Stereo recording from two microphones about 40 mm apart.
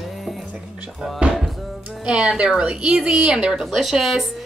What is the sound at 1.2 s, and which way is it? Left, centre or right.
Music, right.